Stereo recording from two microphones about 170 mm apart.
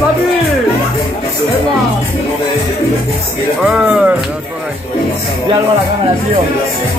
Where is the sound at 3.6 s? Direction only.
5° right (ahead or behind).